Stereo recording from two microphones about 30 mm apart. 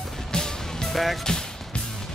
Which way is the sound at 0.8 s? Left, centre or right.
Centre.